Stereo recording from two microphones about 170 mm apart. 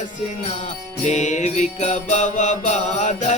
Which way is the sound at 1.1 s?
45° left (ahead or behind).